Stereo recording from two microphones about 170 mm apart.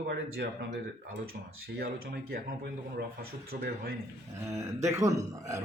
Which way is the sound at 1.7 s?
60° right (ahead or behind).